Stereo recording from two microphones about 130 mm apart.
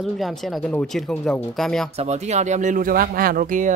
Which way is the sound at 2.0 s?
60° right (ahead or behind).